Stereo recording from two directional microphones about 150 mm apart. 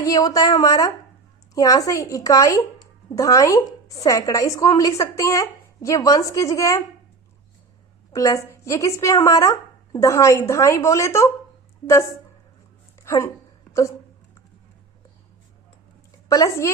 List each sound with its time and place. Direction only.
0.0 s speech: 25° left (ahead or behind)
8.1 s speech: 20° left (ahead or behind)
16.3 s speech: 20° left (ahead or behind)